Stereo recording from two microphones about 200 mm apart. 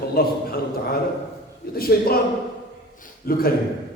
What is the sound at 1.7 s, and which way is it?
Speech, 50° left (ahead or behind).